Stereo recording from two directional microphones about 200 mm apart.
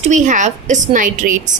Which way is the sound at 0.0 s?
40° right (ahead or behind).